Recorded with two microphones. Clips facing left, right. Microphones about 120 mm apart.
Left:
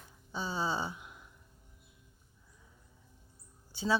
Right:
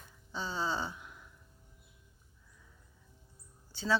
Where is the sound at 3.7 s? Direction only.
15° left (ahead or behind).